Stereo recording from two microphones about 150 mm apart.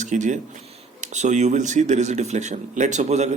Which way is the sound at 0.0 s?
55° right (ahead or behind).